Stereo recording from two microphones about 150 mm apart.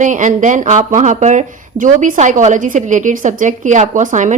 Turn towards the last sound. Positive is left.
turn(degrees=-55)  # may be behind; listen again after turning